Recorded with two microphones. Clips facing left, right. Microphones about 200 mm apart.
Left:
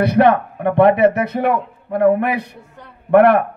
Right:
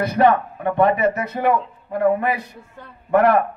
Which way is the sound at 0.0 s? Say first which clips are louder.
Left 3 dB; 65° left (ahead or behind).